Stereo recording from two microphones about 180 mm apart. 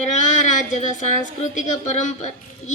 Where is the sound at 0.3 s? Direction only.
45° left (ahead or behind).